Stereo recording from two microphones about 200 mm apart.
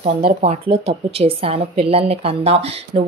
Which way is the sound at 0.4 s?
30° right (ahead or behind).